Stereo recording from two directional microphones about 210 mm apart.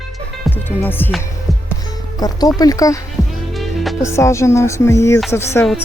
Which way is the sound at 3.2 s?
Centre (ahead or behind).